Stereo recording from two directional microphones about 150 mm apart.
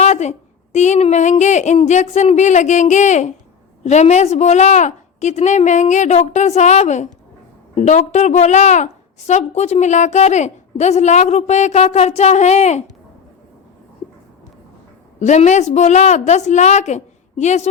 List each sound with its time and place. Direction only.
0.0 s a woman's voice: 50° left (ahead or behind)
15.2 s a woman's voice: 50° left (ahead or behind)